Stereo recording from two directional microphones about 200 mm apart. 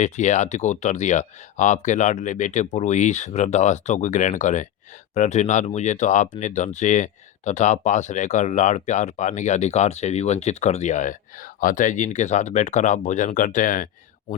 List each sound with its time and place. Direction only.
0.0 s speech: 35° left (ahead or behind)